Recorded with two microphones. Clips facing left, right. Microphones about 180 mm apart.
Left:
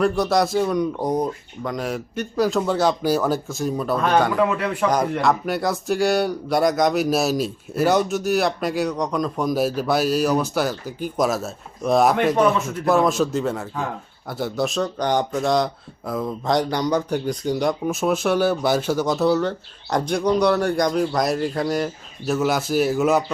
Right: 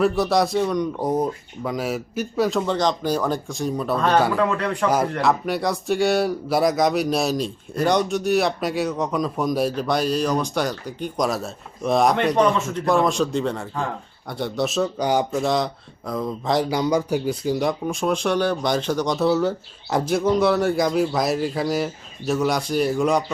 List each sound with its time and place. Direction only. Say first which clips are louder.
0.0 s speech: even; centre (ahead or behind)
4.4 s a man's voice: left 1 dB; 10° left (ahead or behind)
4.9 s speech: even; 5° right (ahead or behind)